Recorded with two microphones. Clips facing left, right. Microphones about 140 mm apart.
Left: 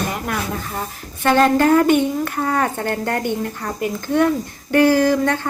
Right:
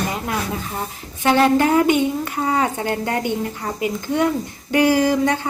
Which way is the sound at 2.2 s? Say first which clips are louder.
Even; 55° left (ahead or behind).